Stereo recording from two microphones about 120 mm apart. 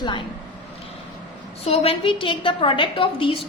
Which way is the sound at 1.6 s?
55° left (ahead or behind).